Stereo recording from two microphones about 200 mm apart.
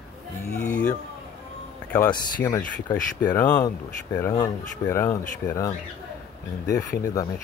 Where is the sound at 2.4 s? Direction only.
20° left (ahead or behind).